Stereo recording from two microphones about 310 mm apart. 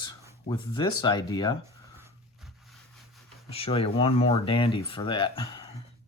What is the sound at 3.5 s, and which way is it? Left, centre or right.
Speech, centre.